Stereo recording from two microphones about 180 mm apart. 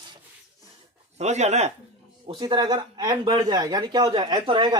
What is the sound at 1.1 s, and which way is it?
Speech, 40° right (ahead or behind).